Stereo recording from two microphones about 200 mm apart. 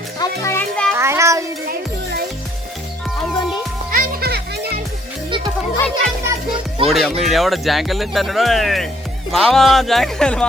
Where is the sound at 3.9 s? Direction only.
45° right (ahead or behind).